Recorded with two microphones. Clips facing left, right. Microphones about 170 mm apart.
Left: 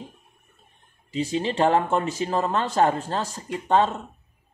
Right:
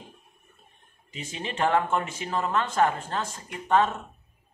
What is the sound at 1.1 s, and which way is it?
Speech, 35° left (ahead or behind).